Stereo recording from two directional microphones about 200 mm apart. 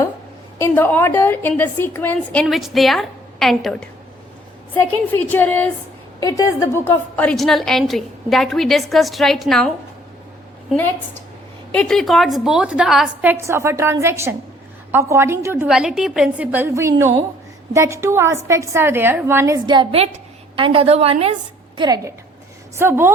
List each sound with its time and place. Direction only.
0.6 s a woman's voice: 10° left (ahead or behind)
5.3 s a woman's voice: 10° left (ahead or behind)
13.3 s a woman's voice: 15° right (ahead or behind); by 21.3 s 30° right (ahead or behind)
21.8 s a woman's voice: 20° right (ahead or behind)